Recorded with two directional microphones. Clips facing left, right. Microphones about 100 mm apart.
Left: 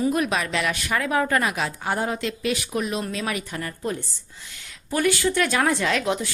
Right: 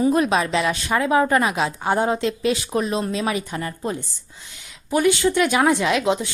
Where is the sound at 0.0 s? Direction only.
30° right (ahead or behind).